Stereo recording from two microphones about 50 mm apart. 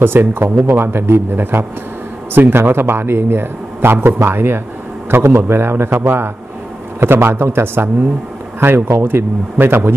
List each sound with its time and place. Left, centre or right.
0.0 s speech: right